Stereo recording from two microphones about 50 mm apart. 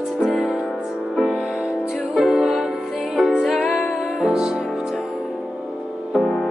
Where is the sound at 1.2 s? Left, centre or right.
Centre.